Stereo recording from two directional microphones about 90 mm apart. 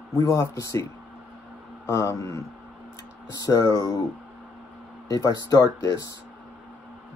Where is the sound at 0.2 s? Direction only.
35° left (ahead or behind).